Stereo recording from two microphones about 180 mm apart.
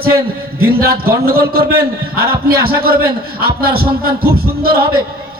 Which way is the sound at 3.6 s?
55° right (ahead or behind).